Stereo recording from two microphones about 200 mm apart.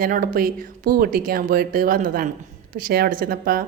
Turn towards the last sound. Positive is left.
turn(degrees=-45)  # may be behind; listen again after turning